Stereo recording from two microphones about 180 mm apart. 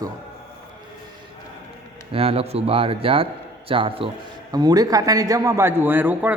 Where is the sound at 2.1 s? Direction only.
30° right (ahead or behind).